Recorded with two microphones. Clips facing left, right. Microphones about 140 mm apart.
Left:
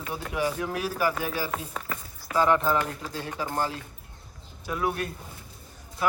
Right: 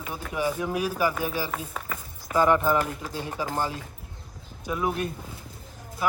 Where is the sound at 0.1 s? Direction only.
5° left (ahead or behind).